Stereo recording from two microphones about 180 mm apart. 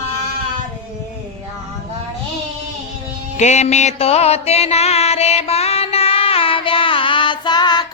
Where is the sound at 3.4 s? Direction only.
40° left (ahead or behind).